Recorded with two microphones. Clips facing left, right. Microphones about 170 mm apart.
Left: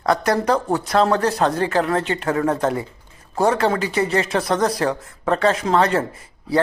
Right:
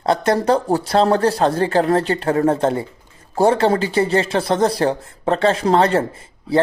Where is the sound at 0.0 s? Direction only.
25° right (ahead or behind).